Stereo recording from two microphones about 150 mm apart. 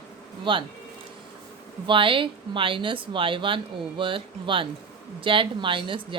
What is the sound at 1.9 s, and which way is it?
Speech, 35° right (ahead or behind).